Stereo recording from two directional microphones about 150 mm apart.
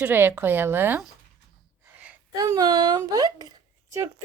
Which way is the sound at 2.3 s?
25° right (ahead or behind).